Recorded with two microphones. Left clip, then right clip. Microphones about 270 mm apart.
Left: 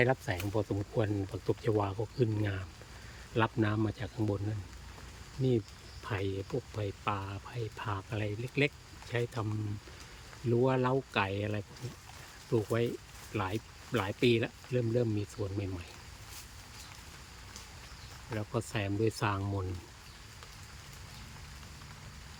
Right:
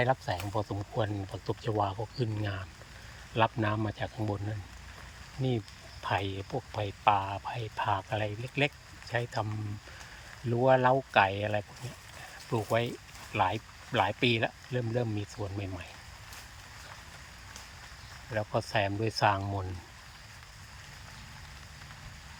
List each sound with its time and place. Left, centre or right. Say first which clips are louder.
0.0 s speech: right 1 dB; centre
6.1 s speech: right 4 dB; centre
10.5 s speech: right 5 dB; centre
18.3 s speech: right 7 dB; centre